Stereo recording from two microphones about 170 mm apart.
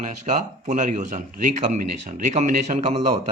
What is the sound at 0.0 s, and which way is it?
Speech, 45° right (ahead or behind).